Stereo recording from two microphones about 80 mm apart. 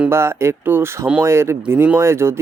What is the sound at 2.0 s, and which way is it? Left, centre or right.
Speech, right.